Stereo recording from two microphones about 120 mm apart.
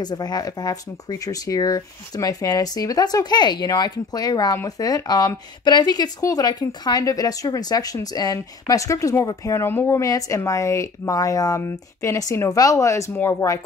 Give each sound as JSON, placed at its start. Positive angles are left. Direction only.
{"t": 0.0, "sound": "speech", "side_deg": 35}